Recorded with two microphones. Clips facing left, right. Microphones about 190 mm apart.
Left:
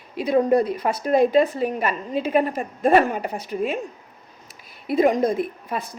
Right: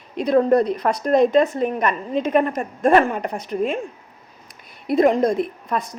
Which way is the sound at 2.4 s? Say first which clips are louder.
Right 2 dB; 50° right (ahead or behind).